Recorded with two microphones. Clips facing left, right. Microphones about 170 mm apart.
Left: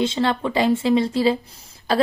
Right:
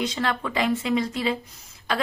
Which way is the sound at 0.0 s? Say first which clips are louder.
Left 6 dB; 25° left (ahead or behind).